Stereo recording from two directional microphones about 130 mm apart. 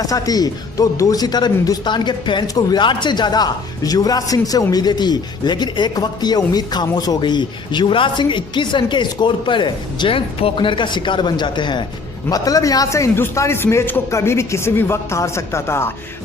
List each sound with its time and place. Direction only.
0.0 s a man's voice: 30° left (ahead or behind)